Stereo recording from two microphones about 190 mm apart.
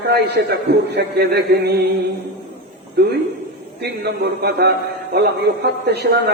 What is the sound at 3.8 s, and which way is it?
Speech, 60° right (ahead or behind).